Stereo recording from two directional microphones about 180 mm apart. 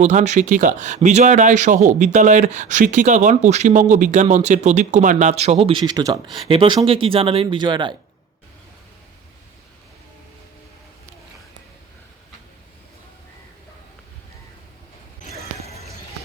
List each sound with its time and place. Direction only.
0.0 s speech: 40° right (ahead or behind); by 6.1 s 20° right (ahead or behind)
6.2 s speech: centre (ahead or behind)
6.5 s speech: 30° right (ahead or behind)
15.2 s a sound: 35° left (ahead or behind)